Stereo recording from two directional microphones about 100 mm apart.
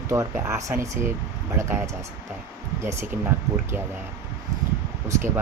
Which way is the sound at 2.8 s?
25° right (ahead or behind).